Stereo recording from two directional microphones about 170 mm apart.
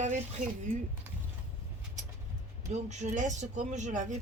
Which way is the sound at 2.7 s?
45° right (ahead or behind).